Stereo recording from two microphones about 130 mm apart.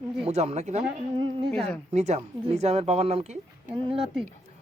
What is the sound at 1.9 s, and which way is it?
Speech, 60° right (ahead or behind).